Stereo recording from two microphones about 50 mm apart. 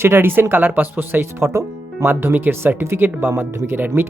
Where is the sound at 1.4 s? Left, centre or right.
Right.